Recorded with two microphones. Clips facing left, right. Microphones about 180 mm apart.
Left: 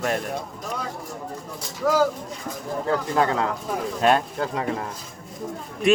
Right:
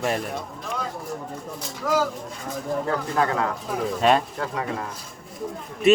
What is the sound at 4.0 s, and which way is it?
Speech, centre (ahead or behind).